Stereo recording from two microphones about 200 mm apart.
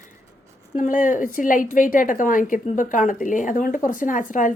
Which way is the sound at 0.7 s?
40° left (ahead or behind).